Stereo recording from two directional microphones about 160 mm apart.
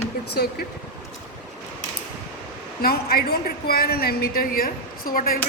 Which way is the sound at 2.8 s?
75° left (ahead or behind).